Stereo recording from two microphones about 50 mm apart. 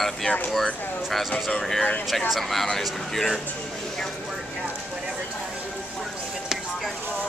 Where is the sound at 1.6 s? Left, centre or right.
Centre.